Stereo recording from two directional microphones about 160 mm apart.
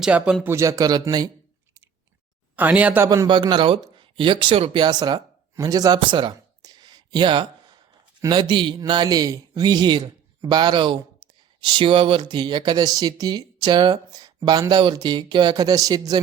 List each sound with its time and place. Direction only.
0.0 s speech: 5° right (ahead or behind)
0.4 s speech: 20° right (ahead or behind)
2.6 s speech: 10° right (ahead or behind)
3.1 s speech: 25° right (ahead or behind)